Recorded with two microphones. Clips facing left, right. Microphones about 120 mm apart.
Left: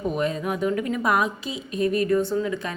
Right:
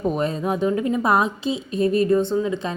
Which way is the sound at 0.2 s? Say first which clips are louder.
Right 3 dB; 30° right (ahead or behind).